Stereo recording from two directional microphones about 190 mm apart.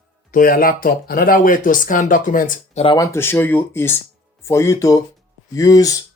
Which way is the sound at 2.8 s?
20° left (ahead or behind).